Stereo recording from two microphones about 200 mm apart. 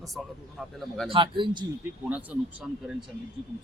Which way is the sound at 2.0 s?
5° right (ahead or behind).